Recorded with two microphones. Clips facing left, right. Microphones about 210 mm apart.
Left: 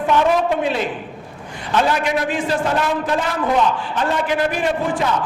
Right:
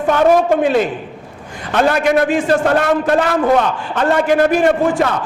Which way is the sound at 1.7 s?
55° right (ahead or behind).